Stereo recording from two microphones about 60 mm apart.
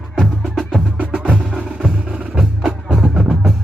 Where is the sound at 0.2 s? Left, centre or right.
Centre.